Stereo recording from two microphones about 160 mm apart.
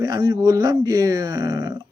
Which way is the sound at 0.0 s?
20° right (ahead or behind).